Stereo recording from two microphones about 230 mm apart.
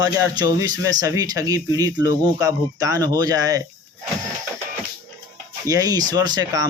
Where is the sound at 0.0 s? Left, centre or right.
Centre.